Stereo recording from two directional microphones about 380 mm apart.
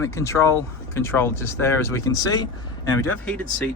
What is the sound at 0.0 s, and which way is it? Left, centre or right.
Speech, centre.